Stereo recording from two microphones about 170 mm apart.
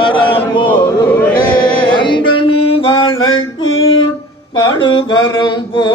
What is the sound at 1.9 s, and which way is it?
Music, 30° left (ahead or behind).